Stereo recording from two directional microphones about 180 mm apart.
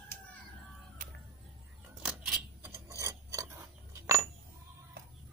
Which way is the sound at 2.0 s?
10° right (ahead or behind).